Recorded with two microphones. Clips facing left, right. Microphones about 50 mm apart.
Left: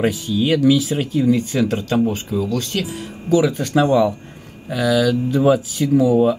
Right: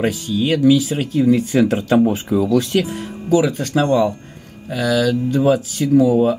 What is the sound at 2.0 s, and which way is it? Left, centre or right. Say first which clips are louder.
Speech: right 4 dB; centre.